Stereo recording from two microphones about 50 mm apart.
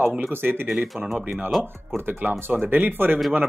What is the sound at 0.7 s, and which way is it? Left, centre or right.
Speech, centre.